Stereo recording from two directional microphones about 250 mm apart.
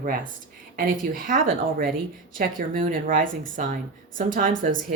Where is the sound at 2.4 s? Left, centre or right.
Right.